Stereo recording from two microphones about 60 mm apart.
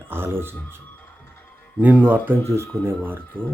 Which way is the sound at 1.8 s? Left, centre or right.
Right.